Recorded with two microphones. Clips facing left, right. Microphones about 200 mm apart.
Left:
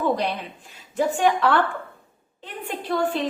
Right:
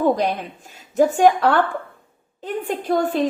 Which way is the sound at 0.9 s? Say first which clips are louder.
Right 6 dB; 45° right (ahead or behind).